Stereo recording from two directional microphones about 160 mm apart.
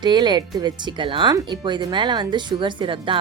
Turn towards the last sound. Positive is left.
turn(degrees=-30)  # may be behind; listen again after turning